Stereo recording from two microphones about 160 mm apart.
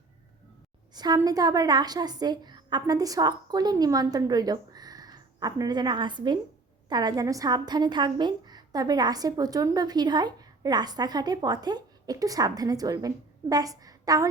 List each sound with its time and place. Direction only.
0.9 s a woman's voice: 25° right (ahead or behind)